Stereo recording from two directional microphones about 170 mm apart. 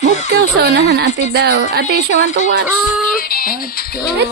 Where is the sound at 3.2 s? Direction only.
60° left (ahead or behind).